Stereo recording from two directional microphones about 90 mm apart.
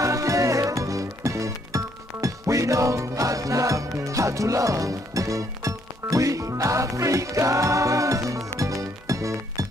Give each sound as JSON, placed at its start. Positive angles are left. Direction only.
{"t": 0.0, "sound": "music", "side_deg": -35}